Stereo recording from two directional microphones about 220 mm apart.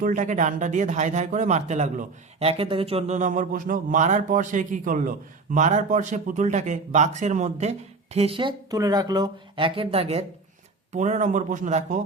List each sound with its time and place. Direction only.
0.0 s speech: 35° right (ahead or behind)